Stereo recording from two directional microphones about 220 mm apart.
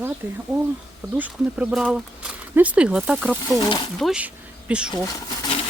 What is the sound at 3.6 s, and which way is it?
Speech, 20° left (ahead or behind).